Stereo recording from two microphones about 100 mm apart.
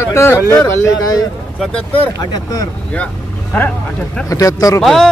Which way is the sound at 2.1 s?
40° left (ahead or behind).